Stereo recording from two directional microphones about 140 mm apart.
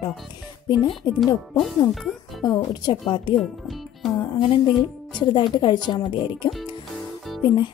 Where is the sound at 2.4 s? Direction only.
30° left (ahead or behind).